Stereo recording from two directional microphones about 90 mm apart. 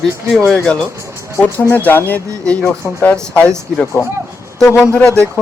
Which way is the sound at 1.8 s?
20° left (ahead or behind).